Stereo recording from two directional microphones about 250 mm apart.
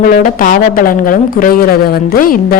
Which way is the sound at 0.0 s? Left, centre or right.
Left.